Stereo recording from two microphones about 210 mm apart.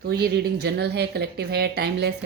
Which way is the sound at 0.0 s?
50° right (ahead or behind).